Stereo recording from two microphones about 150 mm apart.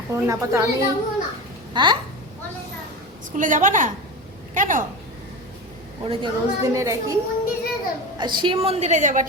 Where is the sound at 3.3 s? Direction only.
60° right (ahead or behind).